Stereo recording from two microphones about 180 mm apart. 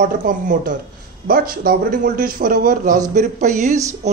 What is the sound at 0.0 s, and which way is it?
Speech, 45° right (ahead or behind).